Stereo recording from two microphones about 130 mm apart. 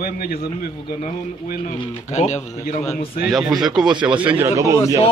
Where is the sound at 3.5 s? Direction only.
Centre (ahead or behind).